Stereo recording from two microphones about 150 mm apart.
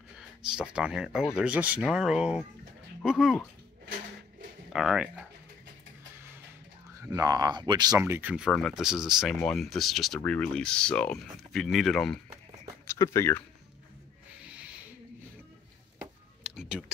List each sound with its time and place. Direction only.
0.4 s speech: 5° right (ahead or behind)
4.7 s speech: 5° right (ahead or behind)
7.0 s speech: 20° right (ahead or behind)
8.5 s speech: 5° left (ahead or behind)
12.8 s speech: 20° left (ahead or behind)
16.0 s a sound: 5° right (ahead or behind)